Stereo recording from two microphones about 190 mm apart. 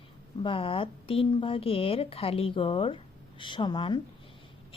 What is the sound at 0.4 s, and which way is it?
Speech, 25° left (ahead or behind).